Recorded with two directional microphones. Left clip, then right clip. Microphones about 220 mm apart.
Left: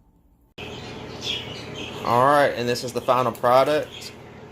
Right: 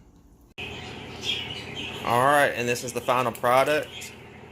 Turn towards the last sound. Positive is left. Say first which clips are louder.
# left 3 dB
turn(degrees=5)  # may be behind; listen again after turning